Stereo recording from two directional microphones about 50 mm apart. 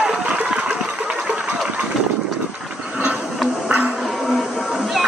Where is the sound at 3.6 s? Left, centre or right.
Right.